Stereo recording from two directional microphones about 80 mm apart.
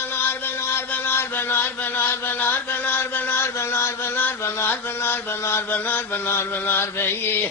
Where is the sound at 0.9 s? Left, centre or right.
Left.